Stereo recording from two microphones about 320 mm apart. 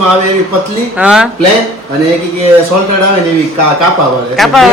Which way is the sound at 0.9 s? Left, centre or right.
Centre.